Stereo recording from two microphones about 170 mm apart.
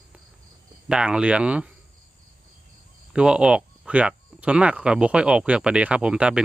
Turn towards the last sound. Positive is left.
turn(degrees=-5)  # may be behind; listen again after turning